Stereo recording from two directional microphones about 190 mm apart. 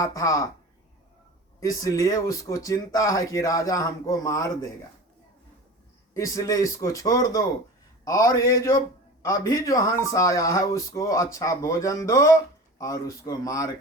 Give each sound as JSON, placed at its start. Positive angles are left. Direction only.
{"t": 0.0, "sound": "speech", "side_deg": 15}
{"t": 1.6, "sound": "speech", "side_deg": 15}
{"t": 6.1, "sound": "speech", "side_deg": 15}